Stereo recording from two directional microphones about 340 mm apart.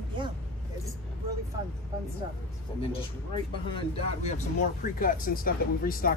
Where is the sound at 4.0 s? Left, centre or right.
Centre.